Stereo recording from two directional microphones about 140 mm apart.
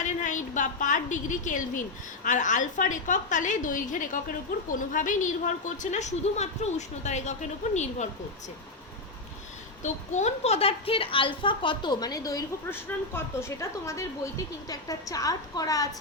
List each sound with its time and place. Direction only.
0.0 s a woman's voice: 60° left (ahead or behind)
9.8 s a woman's voice: 55° left (ahead or behind); by 15.9 s 25° left (ahead or behind)